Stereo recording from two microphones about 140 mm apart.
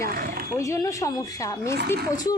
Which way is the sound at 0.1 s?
90° right.